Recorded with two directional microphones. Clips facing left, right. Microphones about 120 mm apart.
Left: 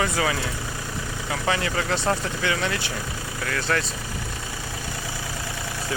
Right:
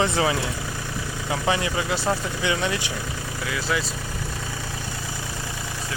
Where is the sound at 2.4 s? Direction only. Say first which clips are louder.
Right 1 dB; 20° right (ahead or behind).